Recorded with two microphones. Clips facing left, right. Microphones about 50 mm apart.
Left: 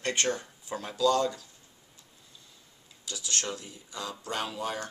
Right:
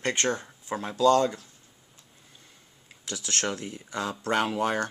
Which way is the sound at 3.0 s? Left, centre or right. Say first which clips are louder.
Right 4 dB; right.